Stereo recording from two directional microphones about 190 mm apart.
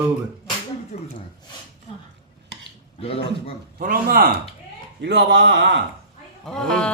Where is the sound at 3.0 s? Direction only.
30° left (ahead or behind).